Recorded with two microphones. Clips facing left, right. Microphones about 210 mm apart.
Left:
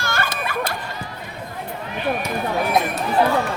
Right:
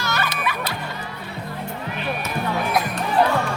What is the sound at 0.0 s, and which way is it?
Music, 50° left (ahead or behind).